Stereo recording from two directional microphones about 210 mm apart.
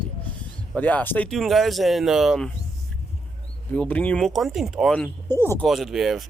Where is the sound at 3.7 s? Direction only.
5° left (ahead or behind).